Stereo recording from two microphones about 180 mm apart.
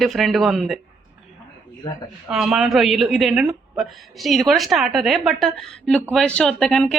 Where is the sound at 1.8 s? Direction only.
25° left (ahead or behind).